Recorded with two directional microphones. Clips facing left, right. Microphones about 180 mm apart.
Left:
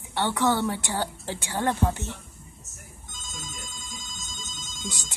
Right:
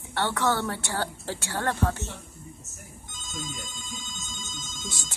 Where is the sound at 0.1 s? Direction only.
15° left (ahead or behind).